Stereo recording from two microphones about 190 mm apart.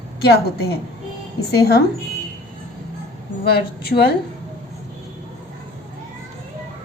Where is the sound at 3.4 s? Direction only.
55° left (ahead or behind).